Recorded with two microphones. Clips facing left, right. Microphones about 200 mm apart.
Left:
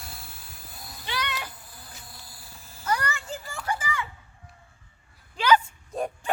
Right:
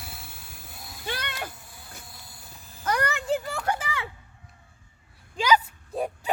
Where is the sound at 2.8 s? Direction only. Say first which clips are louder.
Right 2 dB; 60° right (ahead or behind).